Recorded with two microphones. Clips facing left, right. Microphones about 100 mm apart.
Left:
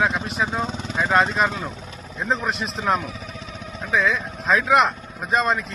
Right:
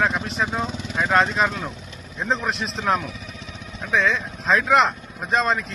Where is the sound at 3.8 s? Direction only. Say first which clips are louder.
Even; centre (ahead or behind).